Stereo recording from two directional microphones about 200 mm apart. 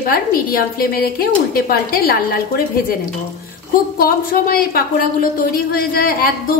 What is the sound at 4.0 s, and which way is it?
A woman's voice, 45° left (ahead or behind).